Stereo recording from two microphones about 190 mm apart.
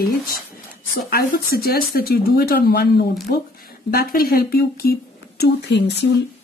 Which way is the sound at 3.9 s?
50° left (ahead or behind).